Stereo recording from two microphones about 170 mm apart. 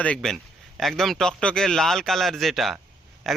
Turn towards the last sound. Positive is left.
turn(degrees=0)  # may be behind; listen again after turning